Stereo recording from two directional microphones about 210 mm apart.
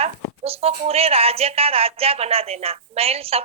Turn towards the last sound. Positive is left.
turn(degrees=-30)  # may be behind; listen again after turning